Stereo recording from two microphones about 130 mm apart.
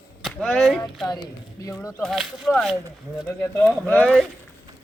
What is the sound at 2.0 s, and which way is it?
Speech, centre (ahead or behind).